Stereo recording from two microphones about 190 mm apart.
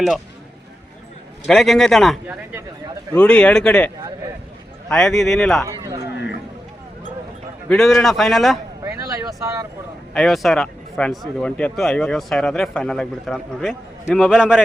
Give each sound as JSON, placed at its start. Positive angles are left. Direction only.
{"t": 1.5, "sound": "speech", "side_deg": 0}
{"t": 3.2, "sound": "speech", "side_deg": 5}
{"t": 5.6, "sound": "speech", "side_deg": -15}
{"t": 7.7, "sound": "speech", "side_deg": 0}
{"t": 8.8, "sound": "speech", "side_deg": -15}
{"t": 10.2, "sound": "speech", "side_deg": 0}